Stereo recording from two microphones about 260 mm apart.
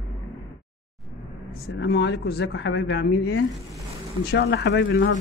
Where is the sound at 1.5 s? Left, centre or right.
Left.